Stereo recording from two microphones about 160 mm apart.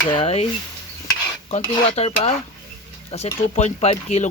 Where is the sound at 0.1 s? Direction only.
35° left (ahead or behind).